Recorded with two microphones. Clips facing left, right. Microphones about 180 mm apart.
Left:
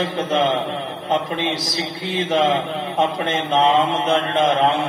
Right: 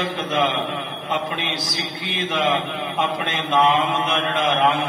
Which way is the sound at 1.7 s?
30° left (ahead or behind).